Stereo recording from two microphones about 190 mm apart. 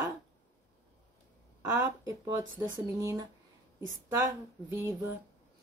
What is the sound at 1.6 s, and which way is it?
Speech, 15° right (ahead or behind).